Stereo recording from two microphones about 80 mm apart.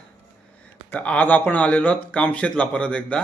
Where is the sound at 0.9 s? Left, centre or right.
Centre.